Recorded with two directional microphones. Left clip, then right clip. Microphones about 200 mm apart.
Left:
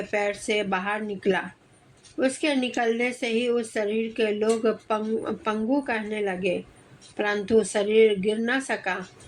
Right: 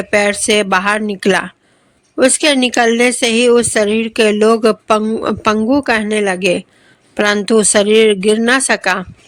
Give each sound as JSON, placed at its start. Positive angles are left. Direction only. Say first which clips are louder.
{"t": 0.1, "sound": "a woman's voice", "louder": "right 14 dB", "side_deg": -45}